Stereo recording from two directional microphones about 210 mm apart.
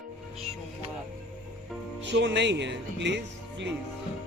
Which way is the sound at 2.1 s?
55° right (ahead or behind).